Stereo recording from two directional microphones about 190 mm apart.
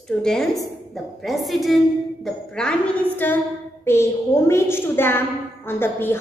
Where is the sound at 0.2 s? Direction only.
Centre (ahead or behind).